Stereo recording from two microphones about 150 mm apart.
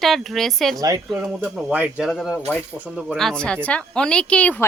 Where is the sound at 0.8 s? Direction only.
25° right (ahead or behind).